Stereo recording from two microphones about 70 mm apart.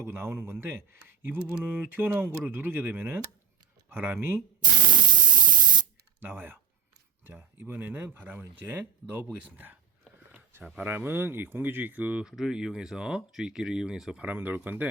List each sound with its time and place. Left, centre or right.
0.0 s speech: right
5.1 s spray: centre
6.1 s speech: right
7.6 s speech: right
10.8 s speech: right
12.4 s speech: centre
14.3 s speech: right